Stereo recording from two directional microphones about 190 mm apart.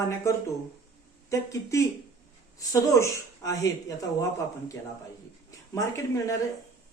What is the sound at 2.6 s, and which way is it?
Speech, 15° left (ahead or behind).